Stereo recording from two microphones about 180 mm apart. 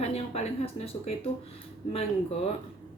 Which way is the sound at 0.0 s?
35° left (ahead or behind).